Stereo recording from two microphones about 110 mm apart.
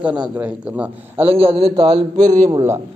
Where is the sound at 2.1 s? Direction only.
35° right (ahead or behind).